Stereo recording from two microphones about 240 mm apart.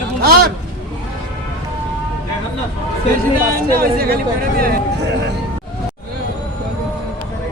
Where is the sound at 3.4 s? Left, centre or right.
Right.